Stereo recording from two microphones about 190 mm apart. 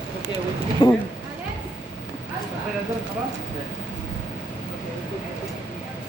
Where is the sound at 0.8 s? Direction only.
25° left (ahead or behind).